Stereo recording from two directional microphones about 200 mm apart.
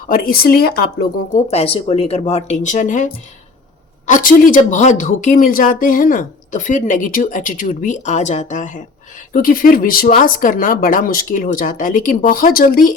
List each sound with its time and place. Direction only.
0.1 s speech: 45° left (ahead or behind)
1.5 s speech: 30° left (ahead or behind)